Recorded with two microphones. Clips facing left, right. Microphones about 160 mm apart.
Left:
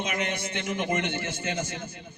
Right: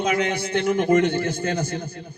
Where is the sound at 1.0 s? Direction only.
35° right (ahead or behind).